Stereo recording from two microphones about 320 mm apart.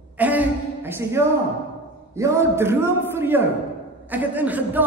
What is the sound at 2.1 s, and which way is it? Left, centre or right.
A man's voice, centre.